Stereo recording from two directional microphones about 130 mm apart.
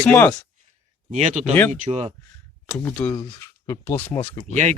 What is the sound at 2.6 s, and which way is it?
Speech, 15° left (ahead or behind).